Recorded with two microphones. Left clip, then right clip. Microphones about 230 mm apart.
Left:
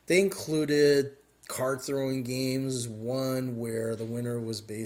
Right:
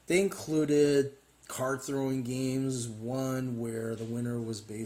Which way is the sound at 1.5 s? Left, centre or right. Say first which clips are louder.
Left 3 dB; left.